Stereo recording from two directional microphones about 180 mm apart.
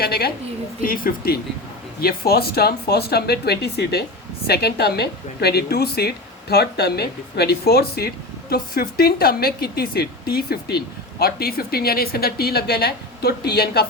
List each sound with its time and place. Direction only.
0.0 s a woman's voice: 60° left (ahead or behind)